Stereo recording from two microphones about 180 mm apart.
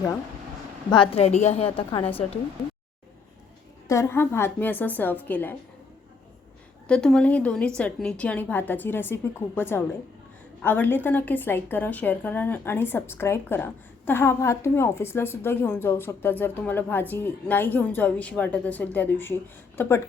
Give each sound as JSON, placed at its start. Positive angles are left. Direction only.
{"t": 0.9, "sound": "a woman's voice", "side_deg": 30}
{"t": 3.8, "sound": "a woman's voice", "side_deg": 15}
{"t": 6.8, "sound": "a woman's voice", "side_deg": 5}